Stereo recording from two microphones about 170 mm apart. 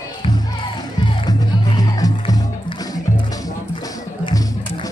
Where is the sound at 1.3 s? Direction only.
20° left (ahead or behind).